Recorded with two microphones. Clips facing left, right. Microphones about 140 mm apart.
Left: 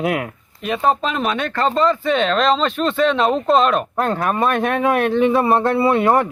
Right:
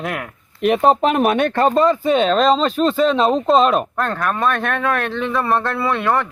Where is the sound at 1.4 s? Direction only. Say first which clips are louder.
Right 4 dB; 20° right (ahead or behind).